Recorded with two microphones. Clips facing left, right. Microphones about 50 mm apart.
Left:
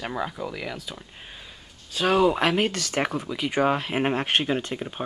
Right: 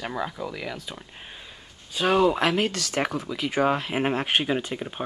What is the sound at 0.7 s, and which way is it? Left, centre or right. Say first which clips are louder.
Speech: even; centre.